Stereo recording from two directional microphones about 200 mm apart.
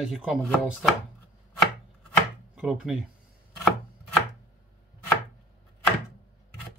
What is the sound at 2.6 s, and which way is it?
Speech, 5° right (ahead or behind).